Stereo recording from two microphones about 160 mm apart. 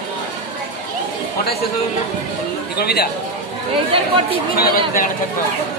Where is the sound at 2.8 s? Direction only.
85° left.